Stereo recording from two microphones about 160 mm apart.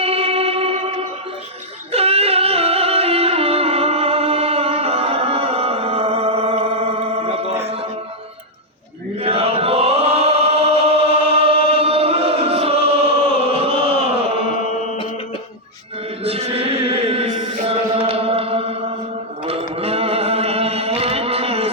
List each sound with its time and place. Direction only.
0.0 s music: 40° right (ahead or behind)
9.1 s chant: 40° right (ahead or behind)
16.2 s chant: 40° right (ahead or behind)
19.7 s a sound: 40° right (ahead or behind)